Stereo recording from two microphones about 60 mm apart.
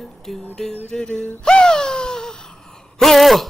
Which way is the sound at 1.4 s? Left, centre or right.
Centre.